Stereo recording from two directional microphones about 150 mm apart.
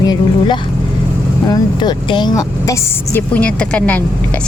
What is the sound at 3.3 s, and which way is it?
Speech, 10° left (ahead or behind).